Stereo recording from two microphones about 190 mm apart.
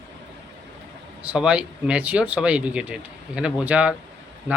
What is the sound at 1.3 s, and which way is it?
A man's voice, 5° right (ahead or behind).